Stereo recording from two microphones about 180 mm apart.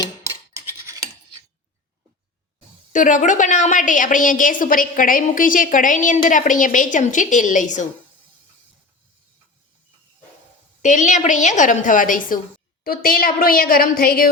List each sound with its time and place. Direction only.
0.3 s a sound: 15° right (ahead or behind)
2.9 s a woman's voice: 45° left (ahead or behind)
10.8 s a woman's voice: 45° left (ahead or behind)